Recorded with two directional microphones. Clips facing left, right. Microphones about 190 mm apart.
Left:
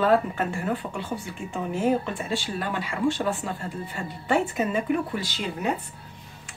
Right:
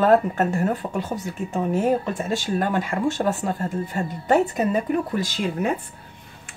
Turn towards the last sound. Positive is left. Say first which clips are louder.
# right 5 dB
turn(degrees=-50)  # may be behind; listen again after turning